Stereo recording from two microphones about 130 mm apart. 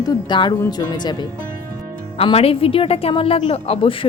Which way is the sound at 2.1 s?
50° left (ahead or behind).